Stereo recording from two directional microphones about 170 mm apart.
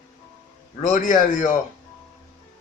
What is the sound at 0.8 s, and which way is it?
Speech, 50° left (ahead or behind).